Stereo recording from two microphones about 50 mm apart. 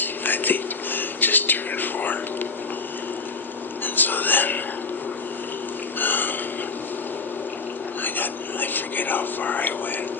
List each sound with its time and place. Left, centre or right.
0.0 s whispering: left
3.8 s whispering: left
6.0 s a sound: left
8.0 s whispering: left